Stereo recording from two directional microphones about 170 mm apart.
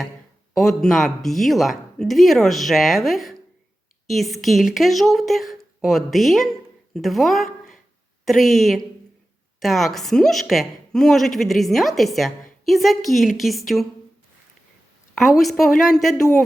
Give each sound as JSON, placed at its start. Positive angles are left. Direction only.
{"t": 0.5, "sound": "speech", "side_deg": 0}
{"t": 15.1, "sound": "speech", "side_deg": 0}